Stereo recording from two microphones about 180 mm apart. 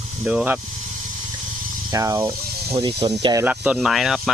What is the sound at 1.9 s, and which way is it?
Speech, 20° right (ahead or behind).